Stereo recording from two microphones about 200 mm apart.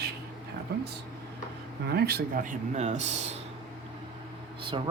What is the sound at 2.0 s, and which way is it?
Speech, 50° right (ahead or behind).